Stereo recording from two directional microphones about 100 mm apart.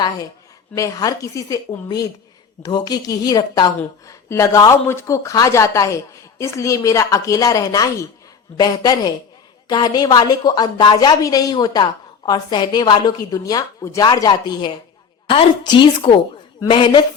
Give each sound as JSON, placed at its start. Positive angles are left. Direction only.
{"t": 0.8, "sound": "a woman's voice", "side_deg": 35}
{"t": 15.3, "sound": "a woman's voice", "side_deg": 55}